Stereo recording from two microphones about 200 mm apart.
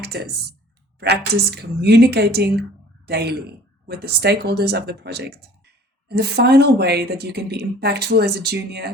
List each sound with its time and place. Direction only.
0.0 s a woman's voice: 55° right (ahead or behind)